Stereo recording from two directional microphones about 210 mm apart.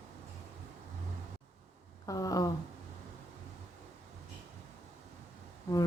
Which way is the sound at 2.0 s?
15° left (ahead or behind).